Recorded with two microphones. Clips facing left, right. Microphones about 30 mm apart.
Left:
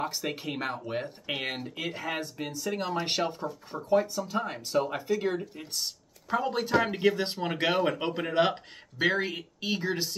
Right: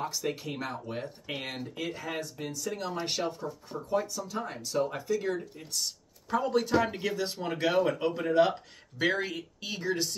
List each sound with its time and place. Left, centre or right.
0.0 s speech: left
8.9 s speech: centre